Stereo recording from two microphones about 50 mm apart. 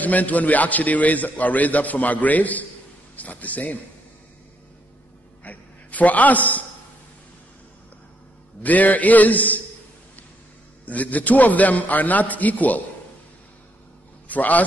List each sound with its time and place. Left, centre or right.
0.0 s a man's voice: left
5.4 s a man's voice: left
8.6 s a man's voice: left
10.9 s a man's voice: left
14.2 s a man's voice: left